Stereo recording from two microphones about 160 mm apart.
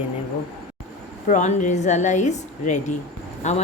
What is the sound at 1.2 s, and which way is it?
A woman's voice, 50° left (ahead or behind).